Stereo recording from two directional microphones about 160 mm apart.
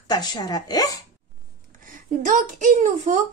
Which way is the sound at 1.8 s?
55° right (ahead or behind).